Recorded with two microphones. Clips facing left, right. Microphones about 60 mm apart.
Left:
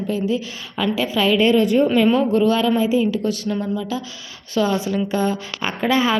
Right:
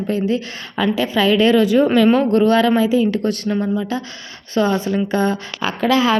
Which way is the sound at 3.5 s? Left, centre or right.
Right.